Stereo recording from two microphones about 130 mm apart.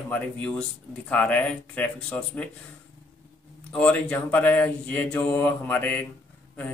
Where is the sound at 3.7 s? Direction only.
10° left (ahead or behind).